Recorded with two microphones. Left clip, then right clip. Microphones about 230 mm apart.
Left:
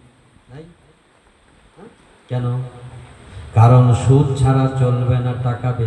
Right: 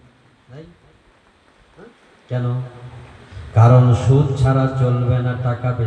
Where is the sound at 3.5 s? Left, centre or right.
Left.